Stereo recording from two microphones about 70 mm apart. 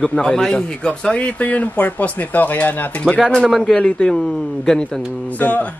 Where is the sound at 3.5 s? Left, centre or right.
Centre.